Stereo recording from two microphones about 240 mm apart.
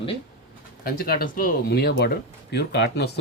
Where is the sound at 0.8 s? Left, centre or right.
Left.